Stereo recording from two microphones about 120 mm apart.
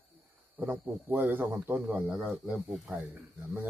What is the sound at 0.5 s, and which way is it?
A man's voice, 15° right (ahead or behind).